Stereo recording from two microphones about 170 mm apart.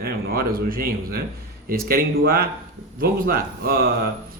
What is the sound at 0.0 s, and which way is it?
Speech, 60° right (ahead or behind).